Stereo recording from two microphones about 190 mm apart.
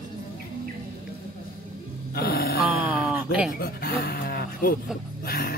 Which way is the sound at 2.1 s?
55° left (ahead or behind).